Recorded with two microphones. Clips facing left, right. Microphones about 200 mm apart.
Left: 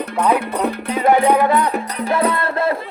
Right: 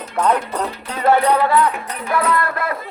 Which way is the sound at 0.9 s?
15° left (ahead or behind).